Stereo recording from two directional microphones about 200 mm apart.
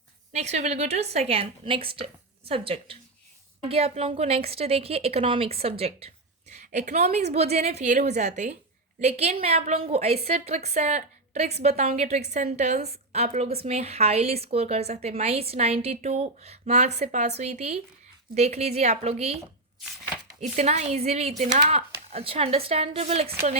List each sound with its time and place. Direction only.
0.3 s a woman's voice: 35° right (ahead or behind)
20.4 s a woman's voice: 35° right (ahead or behind)